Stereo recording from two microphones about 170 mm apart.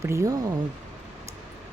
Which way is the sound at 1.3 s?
15° right (ahead or behind).